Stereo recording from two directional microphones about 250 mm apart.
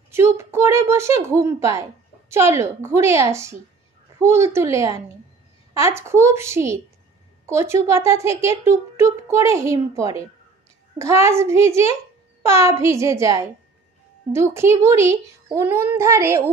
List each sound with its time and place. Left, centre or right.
0.1 s speech: centre